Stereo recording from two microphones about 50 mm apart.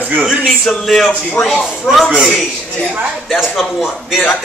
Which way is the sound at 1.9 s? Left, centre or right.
Centre.